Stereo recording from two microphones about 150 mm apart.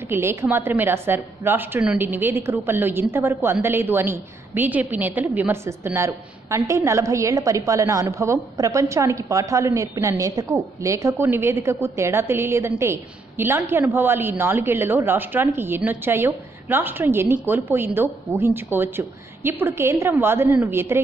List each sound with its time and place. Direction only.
0.1 s a woman's voice: 15° right (ahead or behind)